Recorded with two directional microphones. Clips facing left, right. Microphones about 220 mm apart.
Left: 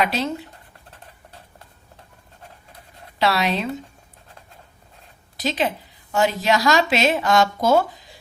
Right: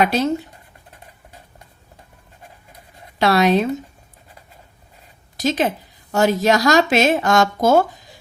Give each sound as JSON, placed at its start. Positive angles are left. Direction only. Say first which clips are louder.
{"t": 0.0, "sound": "a woman's voice", "louder": "right 5 dB", "side_deg": -45}
{"t": 3.2, "sound": "a woman's voice", "louder": "right 6 dB", "side_deg": -45}
{"t": 5.4, "sound": "a woman's voice", "louder": "right 4 dB", "side_deg": -45}